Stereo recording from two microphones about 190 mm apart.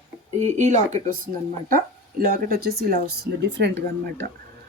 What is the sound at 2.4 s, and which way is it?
Speech, 55° right (ahead or behind).